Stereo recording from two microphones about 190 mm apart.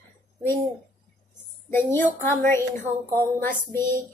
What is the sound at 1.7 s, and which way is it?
Speech, 10° left (ahead or behind).